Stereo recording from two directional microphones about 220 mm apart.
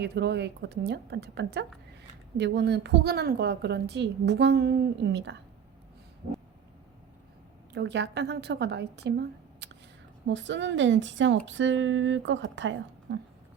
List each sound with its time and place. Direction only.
0.0 s a woman's voice: 50° right (ahead or behind)
7.7 s a woman's voice: 50° right (ahead or behind)